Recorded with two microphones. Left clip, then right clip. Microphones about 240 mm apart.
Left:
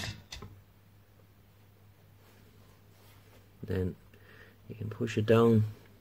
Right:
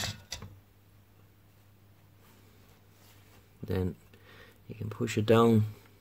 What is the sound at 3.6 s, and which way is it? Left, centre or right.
Speech, centre.